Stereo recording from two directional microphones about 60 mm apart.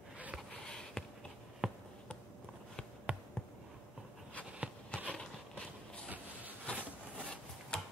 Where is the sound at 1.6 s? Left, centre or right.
Centre.